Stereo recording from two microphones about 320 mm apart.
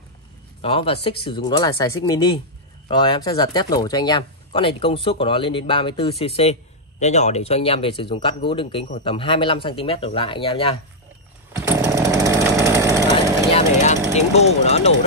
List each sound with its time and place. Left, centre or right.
0.6 s speech: centre
11.5 s chainsaw: centre
13.5 s vehicle: centre
14.1 s speech: centre